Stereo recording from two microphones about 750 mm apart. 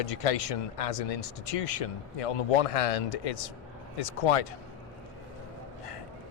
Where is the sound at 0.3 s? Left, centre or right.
Left.